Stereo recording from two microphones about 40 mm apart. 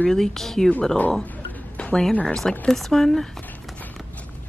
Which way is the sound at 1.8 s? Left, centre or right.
Left.